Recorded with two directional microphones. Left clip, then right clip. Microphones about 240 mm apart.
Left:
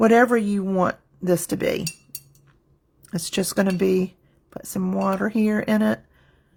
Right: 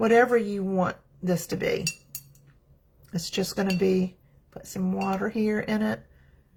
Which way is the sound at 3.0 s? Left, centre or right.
Left.